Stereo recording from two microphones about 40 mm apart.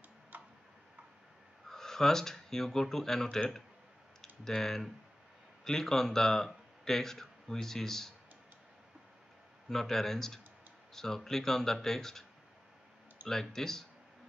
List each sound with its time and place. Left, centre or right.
0.3 s tick-tock: right
1.7 s a man's voice: centre
9.7 s speech: centre
13.3 s speech: centre